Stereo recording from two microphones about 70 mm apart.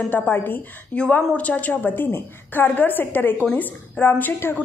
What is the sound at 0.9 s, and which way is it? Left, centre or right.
A woman's voice, centre.